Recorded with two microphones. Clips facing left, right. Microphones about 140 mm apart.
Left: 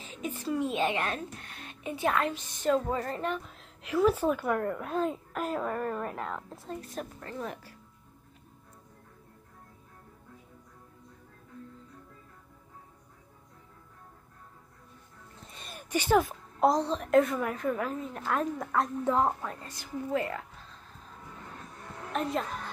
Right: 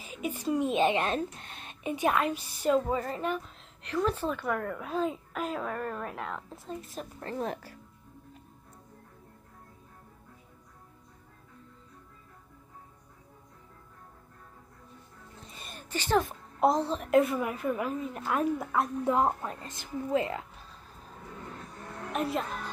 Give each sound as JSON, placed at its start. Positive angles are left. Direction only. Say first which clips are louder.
{"t": 0.0, "sound": "a woman's voice", "louder": "right 2 dB", "side_deg": -10}
{"t": 7.2, "sound": "a woman's voice", "louder": "right 4 dB", "side_deg": -30}
{"t": 15.5, "sound": "a sound", "louder": "left 1 dB", "side_deg": 0}
{"t": 15.8, "sound": "speech", "louder": "left 2 dB", "side_deg": 15}
{"t": 16.5, "sound": "a woman's voice", "louder": "even", "side_deg": -5}
{"t": 22.1, "sound": "speech", "louder": "even", "side_deg": -5}